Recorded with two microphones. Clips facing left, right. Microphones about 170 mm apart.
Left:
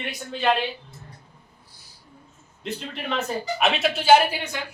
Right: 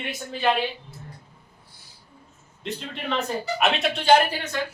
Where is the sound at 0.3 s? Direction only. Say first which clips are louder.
Even; centre (ahead or behind).